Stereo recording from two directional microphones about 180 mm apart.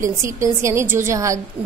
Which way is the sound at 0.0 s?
15° right (ahead or behind).